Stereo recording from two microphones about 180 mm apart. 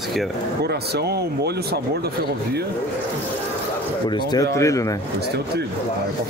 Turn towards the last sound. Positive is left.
turn(degrees=15)  # may be behind; listen again after turning